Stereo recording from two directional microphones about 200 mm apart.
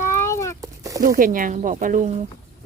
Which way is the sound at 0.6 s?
15° right (ahead or behind).